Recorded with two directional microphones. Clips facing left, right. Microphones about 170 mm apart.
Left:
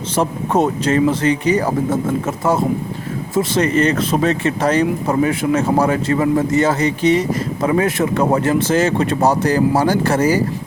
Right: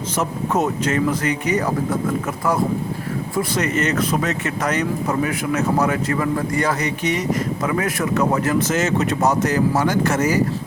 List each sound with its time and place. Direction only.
0.2 s speech: 30° left (ahead or behind)